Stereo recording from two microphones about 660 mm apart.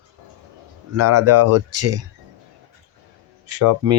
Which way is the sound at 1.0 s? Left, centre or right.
Right.